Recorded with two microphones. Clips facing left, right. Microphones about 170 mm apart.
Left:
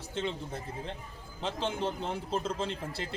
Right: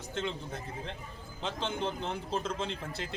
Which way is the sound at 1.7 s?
5° left (ahead or behind).